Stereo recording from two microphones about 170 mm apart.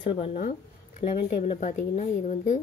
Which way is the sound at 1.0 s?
55° left (ahead or behind).